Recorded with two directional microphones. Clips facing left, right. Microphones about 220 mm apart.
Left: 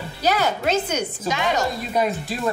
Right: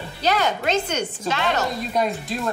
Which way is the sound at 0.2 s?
5° left (ahead or behind).